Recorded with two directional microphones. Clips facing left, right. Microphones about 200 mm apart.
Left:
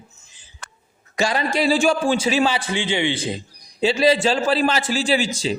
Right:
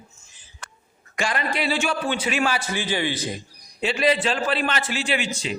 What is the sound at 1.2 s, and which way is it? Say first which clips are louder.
A man's voice: left 5 dB; 30° left (ahead or behind).